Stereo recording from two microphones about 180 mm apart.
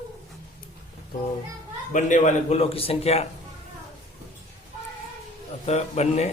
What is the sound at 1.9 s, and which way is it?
A man's voice, 45° left (ahead or behind).